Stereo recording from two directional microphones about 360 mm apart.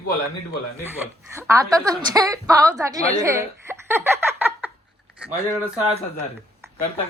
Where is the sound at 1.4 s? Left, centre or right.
Centre.